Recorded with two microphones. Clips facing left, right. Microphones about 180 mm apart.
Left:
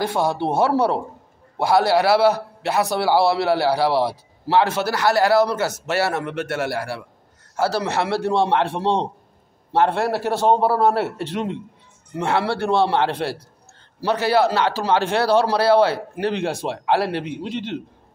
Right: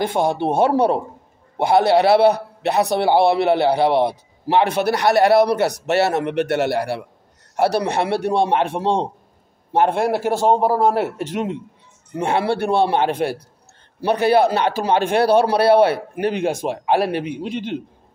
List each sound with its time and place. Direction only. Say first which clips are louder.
0.0 s a man's voice: right 2 dB; 20° right (ahead or behind)